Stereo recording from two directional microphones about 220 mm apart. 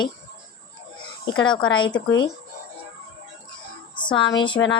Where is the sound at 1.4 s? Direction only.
20° left (ahead or behind).